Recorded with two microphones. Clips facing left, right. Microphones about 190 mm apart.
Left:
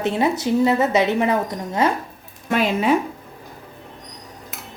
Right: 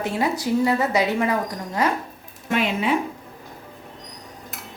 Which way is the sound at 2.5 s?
40° left (ahead or behind).